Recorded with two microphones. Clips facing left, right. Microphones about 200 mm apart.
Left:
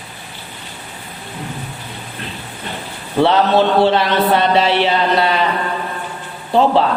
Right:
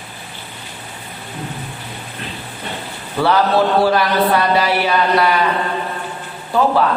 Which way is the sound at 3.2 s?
25° left (ahead or behind).